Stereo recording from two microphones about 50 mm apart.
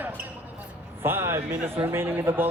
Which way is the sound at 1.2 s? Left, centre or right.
Right.